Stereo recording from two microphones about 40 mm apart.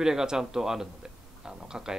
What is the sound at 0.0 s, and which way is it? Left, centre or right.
Speech, centre.